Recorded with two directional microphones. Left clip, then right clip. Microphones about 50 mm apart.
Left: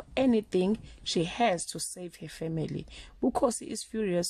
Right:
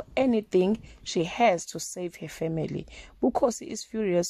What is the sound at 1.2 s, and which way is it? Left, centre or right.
Speech, right.